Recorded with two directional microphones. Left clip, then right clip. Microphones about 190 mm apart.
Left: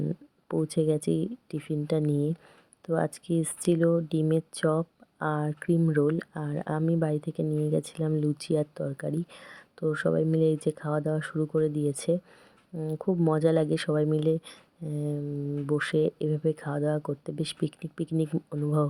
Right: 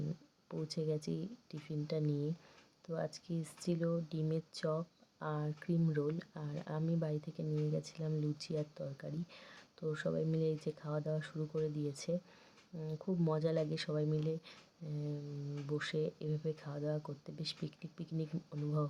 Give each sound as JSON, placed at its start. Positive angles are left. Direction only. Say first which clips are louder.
{"t": 0.4, "sound": "speech", "louder": "left 13 dB", "side_deg": 40}